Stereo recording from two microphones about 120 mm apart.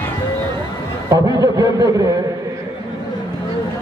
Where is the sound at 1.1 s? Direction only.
30° right (ahead or behind).